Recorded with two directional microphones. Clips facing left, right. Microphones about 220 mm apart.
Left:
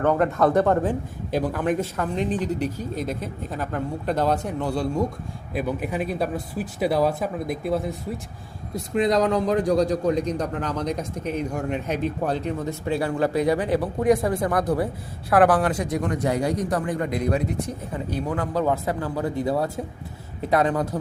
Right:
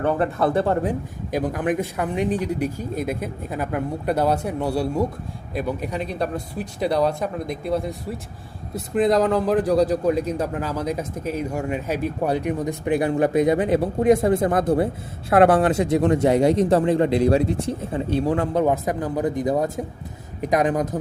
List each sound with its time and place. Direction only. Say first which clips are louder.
0.2 s speech: left 1 dB; 30° right (ahead or behind)
1.5 s speech: right 1 dB; 15° right (ahead or behind)
5.5 s speech: even; 5° left (ahead or behind)
9.0 s speech: right 2 dB; centre (ahead or behind)